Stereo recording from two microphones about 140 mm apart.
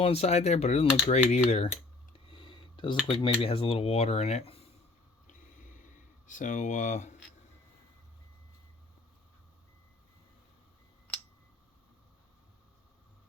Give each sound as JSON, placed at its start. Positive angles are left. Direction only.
{"t": 0.0, "sound": "cutlery", "side_deg": 45}
{"t": 2.3, "sound": "a sound", "side_deg": 35}
{"t": 3.1, "sound": "cutlery", "side_deg": 40}
{"t": 6.2, "sound": "speech", "side_deg": 65}